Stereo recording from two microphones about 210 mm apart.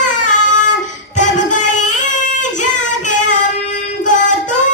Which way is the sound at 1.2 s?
35° left (ahead or behind).